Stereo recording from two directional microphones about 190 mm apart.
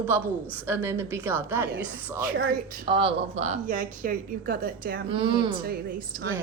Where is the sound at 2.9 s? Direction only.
30° right (ahead or behind); by 5.0 s 55° right (ahead or behind).